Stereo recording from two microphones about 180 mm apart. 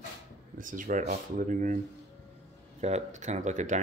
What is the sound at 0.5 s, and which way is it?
Speech, 50° right (ahead or behind).